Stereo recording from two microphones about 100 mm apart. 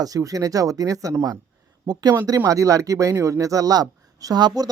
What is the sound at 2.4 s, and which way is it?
Speech, 35° right (ahead or behind).